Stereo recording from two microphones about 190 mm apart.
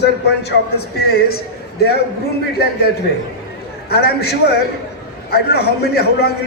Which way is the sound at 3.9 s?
55° left (ahead or behind).